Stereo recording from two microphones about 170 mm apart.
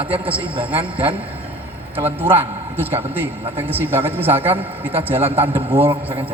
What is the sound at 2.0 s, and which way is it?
Speech, 10° right (ahead or behind).